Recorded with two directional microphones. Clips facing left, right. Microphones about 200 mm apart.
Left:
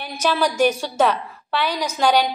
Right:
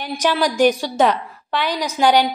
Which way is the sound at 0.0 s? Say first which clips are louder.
Right 2 dB; 15° right (ahead or behind).